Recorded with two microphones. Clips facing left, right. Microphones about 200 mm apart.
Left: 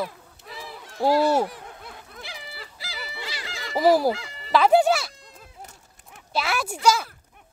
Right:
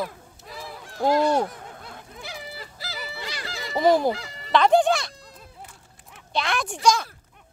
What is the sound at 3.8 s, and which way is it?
Speech, 5° left (ahead or behind).